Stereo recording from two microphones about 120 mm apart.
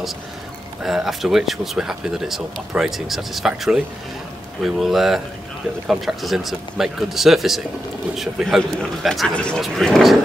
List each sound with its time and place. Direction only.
0.8 s speech: centre (ahead or behind)